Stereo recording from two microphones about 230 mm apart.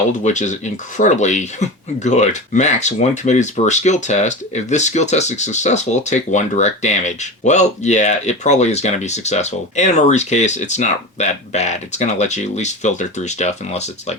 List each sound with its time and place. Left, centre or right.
0.3 s speech: left